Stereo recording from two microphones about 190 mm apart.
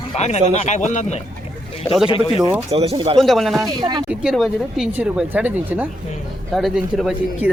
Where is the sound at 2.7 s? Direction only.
30° right (ahead or behind).